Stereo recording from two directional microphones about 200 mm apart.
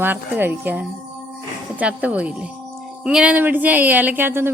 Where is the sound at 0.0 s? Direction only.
10° right (ahead or behind).